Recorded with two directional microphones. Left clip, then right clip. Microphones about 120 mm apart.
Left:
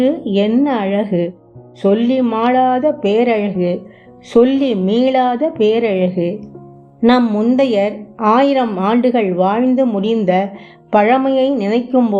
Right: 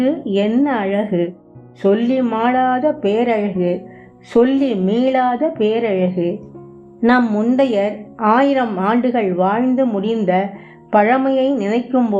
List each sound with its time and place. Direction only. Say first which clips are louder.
0.0 s a woman's voice: left 2 dB; 25° left (ahead or behind)